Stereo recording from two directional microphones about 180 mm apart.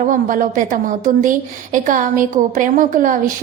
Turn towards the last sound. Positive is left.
turn(degrees=-45)  # may be behind; listen again after turning